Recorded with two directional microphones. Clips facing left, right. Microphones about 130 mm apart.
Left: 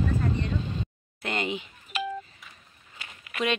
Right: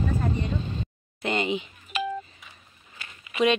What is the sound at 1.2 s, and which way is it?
Speech, centre (ahead or behind).